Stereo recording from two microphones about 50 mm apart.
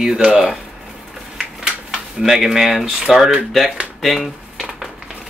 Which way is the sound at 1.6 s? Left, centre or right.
Centre.